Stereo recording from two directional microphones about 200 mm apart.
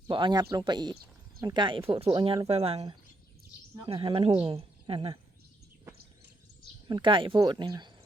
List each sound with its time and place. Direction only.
0.1 s speech: 25° right (ahead or behind)
6.8 s speech: 25° right (ahead or behind)